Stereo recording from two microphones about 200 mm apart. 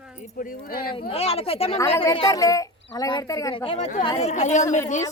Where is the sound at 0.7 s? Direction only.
45° left (ahead or behind).